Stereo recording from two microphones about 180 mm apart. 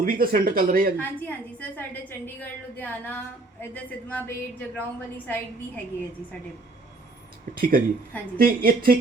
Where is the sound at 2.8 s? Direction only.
10° left (ahead or behind).